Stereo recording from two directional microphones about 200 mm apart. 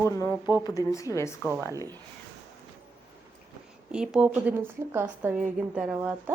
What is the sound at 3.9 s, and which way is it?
A woman's voice, 5° right (ahead or behind).